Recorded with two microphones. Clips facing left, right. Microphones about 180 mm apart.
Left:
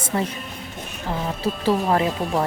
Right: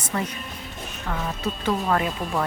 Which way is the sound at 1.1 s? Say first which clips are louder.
Left 3 dB; 30° left (ahead or behind).